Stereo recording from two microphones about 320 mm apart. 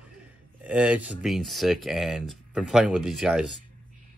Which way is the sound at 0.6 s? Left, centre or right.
Centre.